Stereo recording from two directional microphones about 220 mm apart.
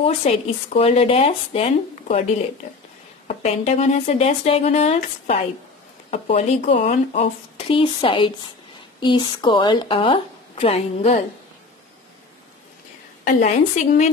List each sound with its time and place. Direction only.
0.0 s speech: 25° left (ahead or behind)
3.3 s speech: 30° left (ahead or behind)
13.2 s a woman's voice: 35° left (ahead or behind)